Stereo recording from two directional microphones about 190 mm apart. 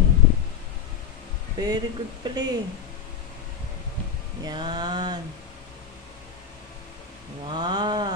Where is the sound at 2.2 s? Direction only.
20° right (ahead or behind).